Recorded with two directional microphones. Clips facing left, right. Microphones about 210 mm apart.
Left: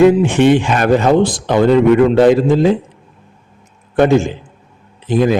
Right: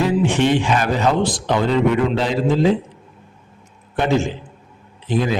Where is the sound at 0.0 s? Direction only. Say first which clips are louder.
Left 8 dB; 50° left (ahead or behind).